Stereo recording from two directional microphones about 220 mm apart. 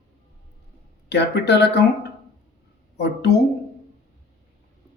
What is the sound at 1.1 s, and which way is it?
Speech, 50° left (ahead or behind).